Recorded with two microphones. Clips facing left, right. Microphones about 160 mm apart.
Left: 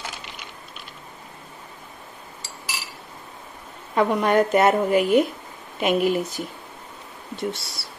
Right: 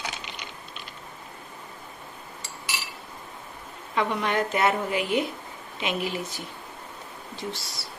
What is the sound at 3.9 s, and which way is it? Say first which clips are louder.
Speech: left 7 dB; 45° left (ahead or behind).